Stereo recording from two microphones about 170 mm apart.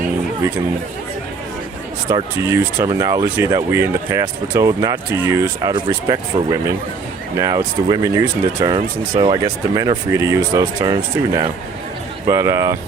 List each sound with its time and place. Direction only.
2.0 s speech: 20° right (ahead or behind)